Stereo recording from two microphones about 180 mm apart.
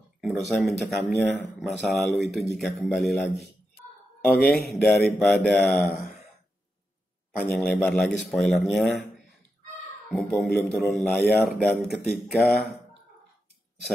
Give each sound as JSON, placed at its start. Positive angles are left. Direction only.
{"t": 0.2, "sound": "speech", "side_deg": 0}
{"t": 4.2, "sound": "speech", "side_deg": 55}
{"t": 4.6, "sound": "speech", "side_deg": 5}
{"t": 7.3, "sound": "speech", "side_deg": 5}
{"t": 10.0, "sound": "speech", "side_deg": 0}